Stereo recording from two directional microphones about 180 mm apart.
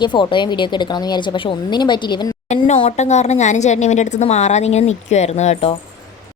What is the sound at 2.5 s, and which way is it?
A woman's voice, 40° left (ahead or behind).